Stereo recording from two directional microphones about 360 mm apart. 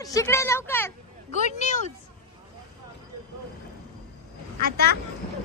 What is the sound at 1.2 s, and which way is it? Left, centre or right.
Speech, centre.